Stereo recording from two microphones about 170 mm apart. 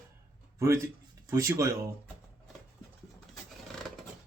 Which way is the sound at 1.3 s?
20° right (ahead or behind).